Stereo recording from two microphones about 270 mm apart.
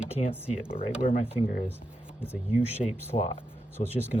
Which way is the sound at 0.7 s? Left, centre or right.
Left.